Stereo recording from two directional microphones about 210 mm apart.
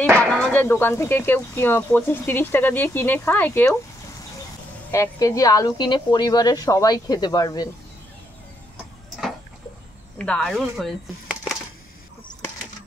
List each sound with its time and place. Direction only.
0.2 s speech: 5° left (ahead or behind)
4.9 s speech: 15° left (ahead or behind)
10.1 s speech: 5° left (ahead or behind)